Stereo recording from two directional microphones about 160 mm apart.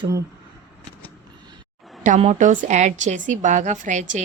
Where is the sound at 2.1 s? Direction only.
50° right (ahead or behind).